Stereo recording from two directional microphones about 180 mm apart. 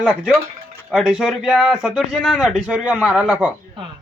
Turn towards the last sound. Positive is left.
turn(degrees=-5)  # may be behind; listen again after turning